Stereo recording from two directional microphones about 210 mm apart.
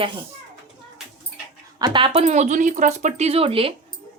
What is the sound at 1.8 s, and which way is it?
Speech, 25° right (ahead or behind).